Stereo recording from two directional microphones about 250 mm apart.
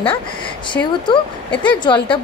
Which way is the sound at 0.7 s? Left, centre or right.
Centre.